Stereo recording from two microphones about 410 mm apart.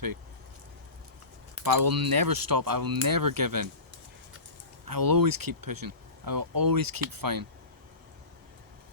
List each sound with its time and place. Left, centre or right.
1.6 s speech: right
4.9 s speech: right